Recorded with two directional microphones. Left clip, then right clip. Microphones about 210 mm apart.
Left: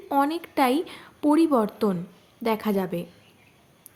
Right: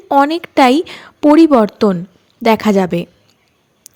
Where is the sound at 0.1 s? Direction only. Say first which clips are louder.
Right 12 dB; 35° right (ahead or behind).